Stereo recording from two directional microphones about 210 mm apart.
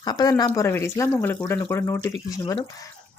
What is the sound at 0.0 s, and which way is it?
Speech, 20° left (ahead or behind).